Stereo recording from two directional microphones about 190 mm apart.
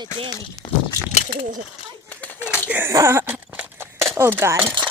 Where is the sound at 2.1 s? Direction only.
10° left (ahead or behind).